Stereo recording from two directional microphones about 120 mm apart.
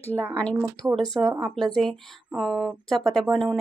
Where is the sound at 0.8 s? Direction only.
15° right (ahead or behind).